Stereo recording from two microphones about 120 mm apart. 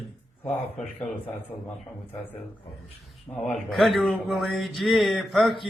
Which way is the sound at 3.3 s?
25° left (ahead or behind).